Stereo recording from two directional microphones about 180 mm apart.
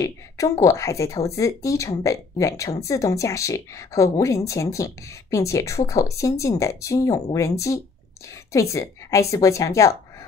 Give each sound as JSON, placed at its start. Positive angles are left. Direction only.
{"t": 0.0, "sound": "speech", "side_deg": 15}